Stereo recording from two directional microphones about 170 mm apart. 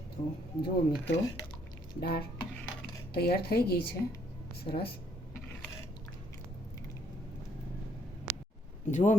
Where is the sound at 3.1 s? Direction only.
70° left (ahead or behind).